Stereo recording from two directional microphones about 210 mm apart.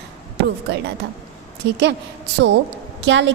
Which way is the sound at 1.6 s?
55° right (ahead or behind).